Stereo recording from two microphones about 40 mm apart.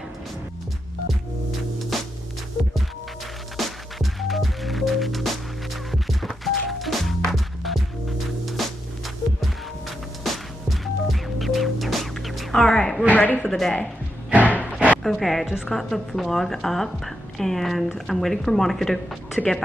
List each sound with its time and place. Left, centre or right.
1.9 s music: centre
3.5 s music: centre
6.4 s music: centre
12.6 s a sound: centre
13.1 s speech: left
13.5 s speech: centre
14.4 s a sound: left
15.0 s a woman's voice: centre
15.4 s a woman's voice: centre
15.7 s a woman's voice: centre